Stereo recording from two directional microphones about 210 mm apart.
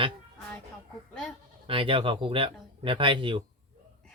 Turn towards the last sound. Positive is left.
turn(degrees=-25)  # may be behind; listen again after turning